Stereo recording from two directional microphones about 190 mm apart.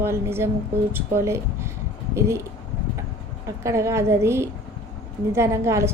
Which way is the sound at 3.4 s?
15° right (ahead or behind).